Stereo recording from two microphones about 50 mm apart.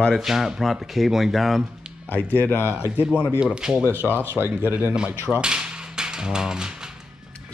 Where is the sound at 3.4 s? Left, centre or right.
Centre.